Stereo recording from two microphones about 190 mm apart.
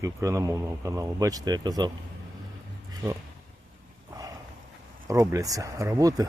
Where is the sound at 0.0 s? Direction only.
15° right (ahead or behind).